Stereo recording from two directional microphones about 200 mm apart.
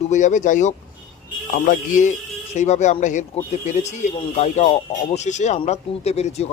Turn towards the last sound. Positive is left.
turn(degrees=30)  # may be behind; listen again after turning